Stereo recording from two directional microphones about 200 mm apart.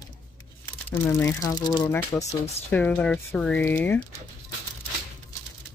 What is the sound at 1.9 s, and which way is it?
Speech, 10° left (ahead or behind).